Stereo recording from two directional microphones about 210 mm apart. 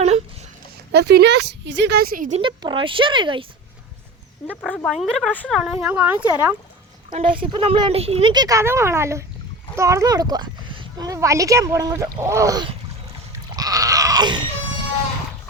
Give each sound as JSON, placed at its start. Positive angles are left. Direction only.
{"t": 0.9, "sound": "a woman's voice", "side_deg": -50}
{"t": 2.4, "sound": "speech", "side_deg": -20}
{"t": 4.4, "sound": "speech", "side_deg": 5}
{"t": 7.1, "sound": "speech", "side_deg": -25}
{"t": 13.6, "sound": "a sound", "side_deg": -15}